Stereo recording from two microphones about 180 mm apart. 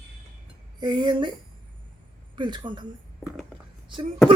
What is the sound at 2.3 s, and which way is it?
Speech, 25° right (ahead or behind).